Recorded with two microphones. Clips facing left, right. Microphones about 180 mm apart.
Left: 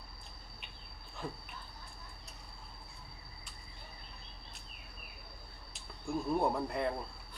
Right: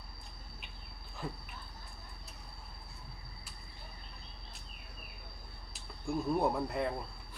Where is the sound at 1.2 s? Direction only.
Centre (ahead or behind).